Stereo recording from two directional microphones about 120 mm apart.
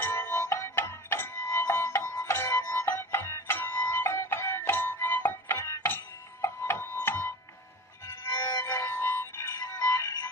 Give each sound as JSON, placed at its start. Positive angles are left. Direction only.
{"t": 0.0, "sound": "music", "side_deg": 20}